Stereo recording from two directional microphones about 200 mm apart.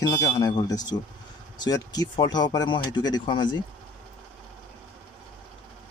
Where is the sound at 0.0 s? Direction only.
20° left (ahead or behind).